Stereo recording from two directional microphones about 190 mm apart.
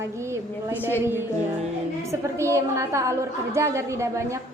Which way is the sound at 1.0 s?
10° right (ahead or behind).